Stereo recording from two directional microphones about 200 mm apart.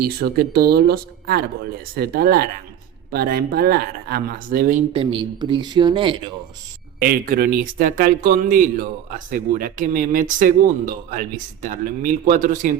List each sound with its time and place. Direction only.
0.0 s speech: 50° right (ahead or behind)
4.9 s speech: 25° right (ahead or behind)
7.0 s speech: 45° right (ahead or behind)